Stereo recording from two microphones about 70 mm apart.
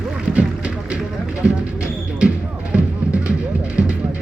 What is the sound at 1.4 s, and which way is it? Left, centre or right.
Music, centre.